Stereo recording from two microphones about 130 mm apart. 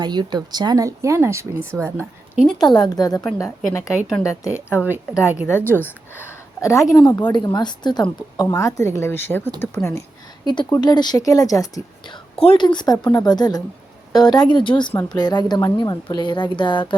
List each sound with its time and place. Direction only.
0.0 s speech: 35° right (ahead or behind)
2.6 s a woman's voice: 30° left (ahead or behind)
4.7 s a woman's voice: 10° right (ahead or behind)
5.5 s a woman's voice: 15° left (ahead or behind)
7.1 s a woman's voice: 35° left (ahead or behind)
10.4 s a woman's voice: 35° left (ahead or behind)